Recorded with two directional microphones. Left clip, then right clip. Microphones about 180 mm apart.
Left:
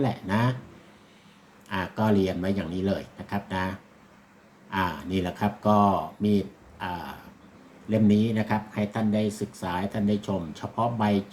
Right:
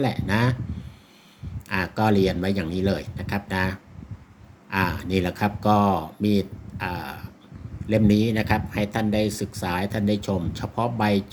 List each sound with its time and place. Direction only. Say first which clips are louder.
0.0 s speech: right 3 dB; 45° right (ahead or behind)
1.7 s speech: right 4 dB; 45° right (ahead or behind)